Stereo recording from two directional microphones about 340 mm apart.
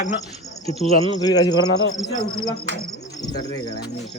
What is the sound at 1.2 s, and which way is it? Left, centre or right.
Speech, centre.